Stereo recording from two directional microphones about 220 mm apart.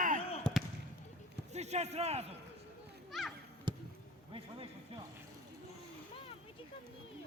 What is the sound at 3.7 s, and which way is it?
Basketball bounce, 20° right (ahead or behind).